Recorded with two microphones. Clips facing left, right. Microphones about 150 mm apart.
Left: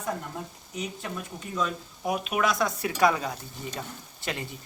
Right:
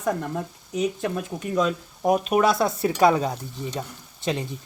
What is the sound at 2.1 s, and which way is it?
Speech, 40° right (ahead or behind).